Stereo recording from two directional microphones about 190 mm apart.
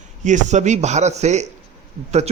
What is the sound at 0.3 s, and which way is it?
Speech, 40° right (ahead or behind).